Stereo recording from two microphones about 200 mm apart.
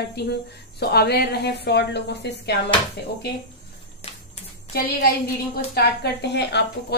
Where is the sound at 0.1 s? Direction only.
55° left (ahead or behind).